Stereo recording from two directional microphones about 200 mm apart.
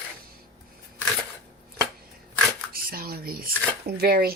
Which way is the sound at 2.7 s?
50° right (ahead or behind).